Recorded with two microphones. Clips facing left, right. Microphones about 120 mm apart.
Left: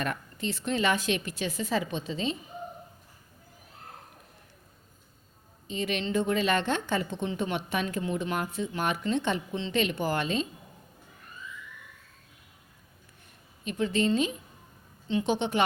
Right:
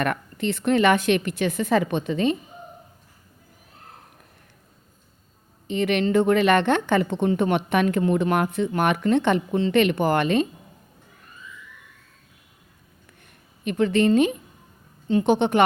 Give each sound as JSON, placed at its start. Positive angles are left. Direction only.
{"t": 0.0, "sound": "a woman's voice", "side_deg": -65}
{"t": 5.6, "sound": "a woman's voice", "side_deg": -65}
{"t": 13.7, "sound": "a woman's voice", "side_deg": -65}